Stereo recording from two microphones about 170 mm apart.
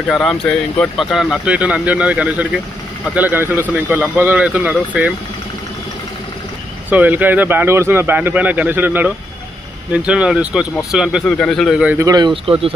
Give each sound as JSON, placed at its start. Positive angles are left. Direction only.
{"t": 0.1, "sound": "a man's voice", "side_deg": 0}
{"t": 6.9, "sound": "a man's voice", "side_deg": -10}
{"t": 12.0, "sound": "speech", "side_deg": -20}